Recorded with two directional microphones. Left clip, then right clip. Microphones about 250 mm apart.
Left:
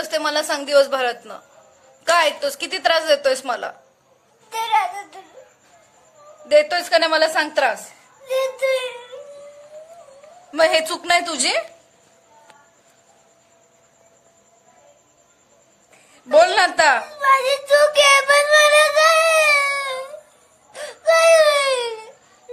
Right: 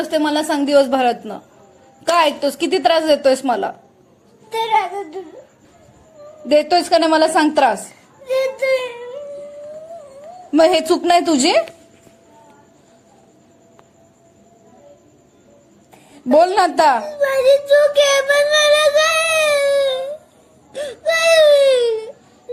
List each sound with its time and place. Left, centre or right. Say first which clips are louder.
0.0 s a woman's voice: right 3 dB; centre
6.5 s a woman's voice: right 2 dB; centre
8.4 s child singing: right 2 dB; centre
10.5 s a woman's voice: right 4 dB; centre
16.3 s a woman's voice: right 1 dB; centre
17.1 s child singing: right 3 dB; centre
20.7 s whimper: left 2 dB; centre